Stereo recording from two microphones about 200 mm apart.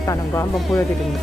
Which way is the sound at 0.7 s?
Centre (ahead or behind).